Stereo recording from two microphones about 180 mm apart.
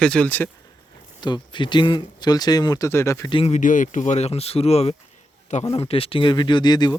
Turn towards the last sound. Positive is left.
turn(degrees=25)  # may be behind; listen again after turning